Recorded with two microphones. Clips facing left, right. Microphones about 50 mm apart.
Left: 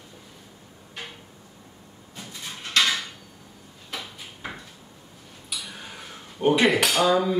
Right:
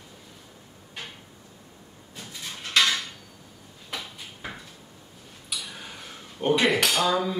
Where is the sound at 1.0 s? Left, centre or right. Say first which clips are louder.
Left 1 dB; centre.